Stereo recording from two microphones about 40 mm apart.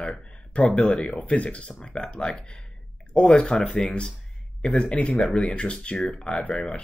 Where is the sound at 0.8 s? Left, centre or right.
Left.